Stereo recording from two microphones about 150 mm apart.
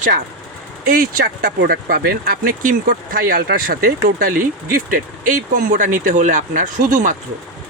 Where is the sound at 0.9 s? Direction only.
75° right (ahead or behind).